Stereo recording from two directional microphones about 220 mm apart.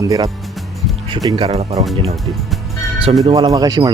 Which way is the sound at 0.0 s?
15° right (ahead or behind).